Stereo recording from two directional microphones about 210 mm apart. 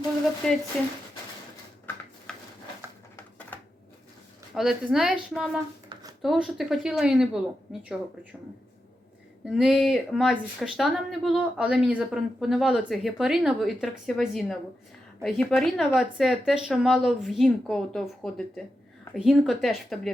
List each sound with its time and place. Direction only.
0.4 s speech: centre (ahead or behind)
2.3 s a sound: 5° left (ahead or behind)
4.5 s speech: centre (ahead or behind)
5.9 s a sound: 20° right (ahead or behind)
6.2 s speech: centre (ahead or behind)
9.6 s speech: centre (ahead or behind)